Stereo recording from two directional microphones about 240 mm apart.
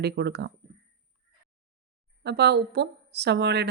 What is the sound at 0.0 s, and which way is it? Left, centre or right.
Speech, right.